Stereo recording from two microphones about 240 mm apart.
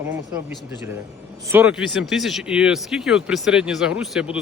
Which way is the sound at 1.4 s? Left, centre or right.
Centre.